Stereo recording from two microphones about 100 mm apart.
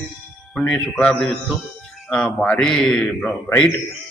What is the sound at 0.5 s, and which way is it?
A man's voice, 10° left (ahead or behind).